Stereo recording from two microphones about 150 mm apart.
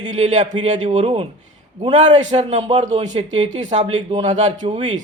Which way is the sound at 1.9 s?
50° right (ahead or behind).